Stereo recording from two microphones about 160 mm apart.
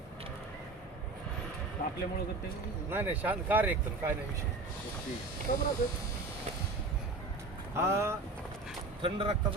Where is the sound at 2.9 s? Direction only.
10° right (ahead or behind).